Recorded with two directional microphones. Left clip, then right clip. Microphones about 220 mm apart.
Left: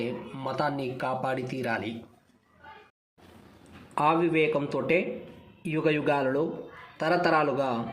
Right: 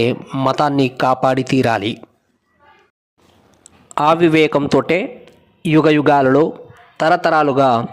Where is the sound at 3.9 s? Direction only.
45° right (ahead or behind).